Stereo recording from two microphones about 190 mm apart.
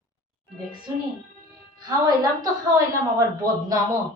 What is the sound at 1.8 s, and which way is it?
Speech, 20° right (ahead or behind).